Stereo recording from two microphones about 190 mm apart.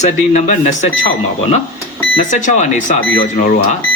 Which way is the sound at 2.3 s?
40° left (ahead or behind).